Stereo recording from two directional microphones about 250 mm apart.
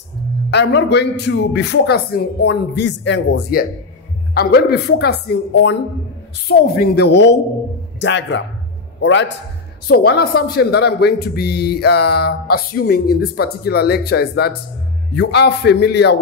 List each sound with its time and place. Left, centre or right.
0.5 s a man's voice: left